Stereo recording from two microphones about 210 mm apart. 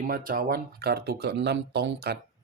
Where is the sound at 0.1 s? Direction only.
40° right (ahead or behind).